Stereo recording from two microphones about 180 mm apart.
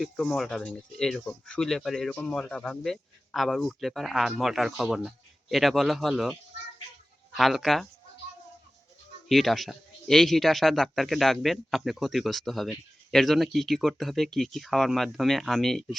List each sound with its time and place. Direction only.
0.0 s speech: centre (ahead or behind)
7.3 s speech: centre (ahead or behind)
9.3 s speech: centre (ahead or behind)